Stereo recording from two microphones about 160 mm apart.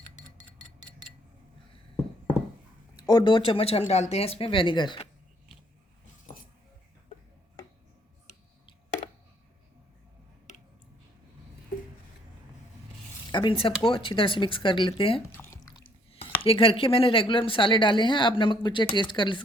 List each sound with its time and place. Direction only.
0.2 s clock: 50° left (ahead or behind)
2.9 s speech: 30° left (ahead or behind)
13.3 s speech: 30° left (ahead or behind)
15.3 s drip: 15° left (ahead or behind)
16.4 s speech: 35° left (ahead or behind)